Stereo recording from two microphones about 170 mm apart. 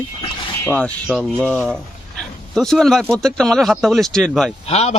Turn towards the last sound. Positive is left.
turn(degrees=40)  # may be behind; listen again after turning